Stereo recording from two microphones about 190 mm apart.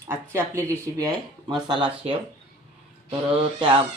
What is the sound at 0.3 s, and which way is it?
Speech, 15° right (ahead or behind).